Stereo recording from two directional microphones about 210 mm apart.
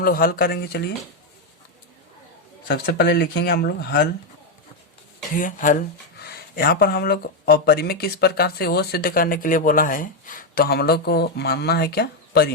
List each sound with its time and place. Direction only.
0.0 s speech: 45° left (ahead or behind)
2.6 s speech: 50° left (ahead or behind)
5.3 s speech: 40° left (ahead or behind)